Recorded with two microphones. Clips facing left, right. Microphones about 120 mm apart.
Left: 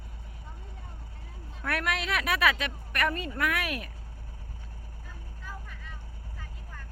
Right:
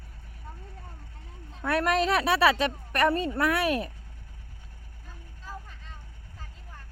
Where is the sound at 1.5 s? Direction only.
30° right (ahead or behind).